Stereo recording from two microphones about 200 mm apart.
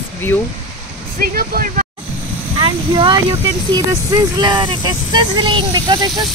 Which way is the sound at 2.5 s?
25° right (ahead or behind).